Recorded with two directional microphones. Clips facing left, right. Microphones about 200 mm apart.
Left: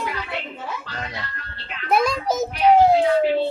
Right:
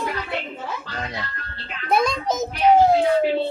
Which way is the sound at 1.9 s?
5° left (ahead or behind).